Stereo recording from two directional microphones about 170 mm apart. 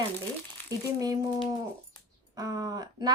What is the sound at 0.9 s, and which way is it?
Speech, 20° right (ahead or behind).